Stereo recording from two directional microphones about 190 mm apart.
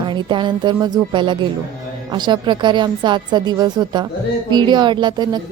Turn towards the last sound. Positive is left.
turn(degrees=-25)  # may be behind; listen again after turning